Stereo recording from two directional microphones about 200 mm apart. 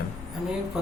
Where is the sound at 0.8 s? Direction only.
Centre (ahead or behind).